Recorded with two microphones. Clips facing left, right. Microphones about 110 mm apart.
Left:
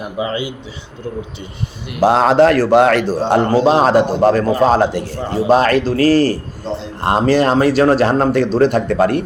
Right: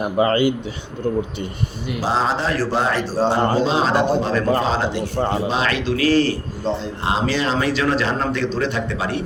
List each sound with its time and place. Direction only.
0.2 s speech: 55° right (ahead or behind)
2.0 s a man's voice: 65° left (ahead or behind); by 6.3 s 40° left (ahead or behind)
7.0 s speech: 55° left (ahead or behind)